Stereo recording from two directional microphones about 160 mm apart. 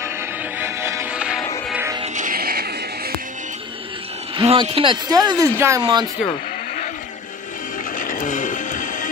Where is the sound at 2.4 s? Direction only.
70° right (ahead or behind).